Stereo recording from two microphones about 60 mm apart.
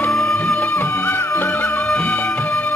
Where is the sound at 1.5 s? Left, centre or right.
Left.